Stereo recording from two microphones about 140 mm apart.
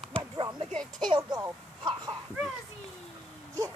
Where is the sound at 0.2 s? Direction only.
25° right (ahead or behind).